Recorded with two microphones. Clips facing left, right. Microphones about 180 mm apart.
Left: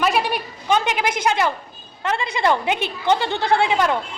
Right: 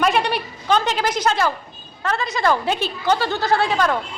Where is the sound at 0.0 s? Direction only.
5° left (ahead or behind).